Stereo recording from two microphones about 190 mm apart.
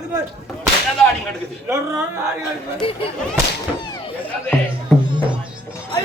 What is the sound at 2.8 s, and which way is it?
Whip, 30° left (ahead or behind).